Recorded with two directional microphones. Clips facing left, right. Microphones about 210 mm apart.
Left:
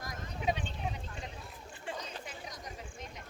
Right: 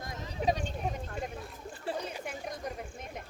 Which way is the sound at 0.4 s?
40° right (ahead or behind).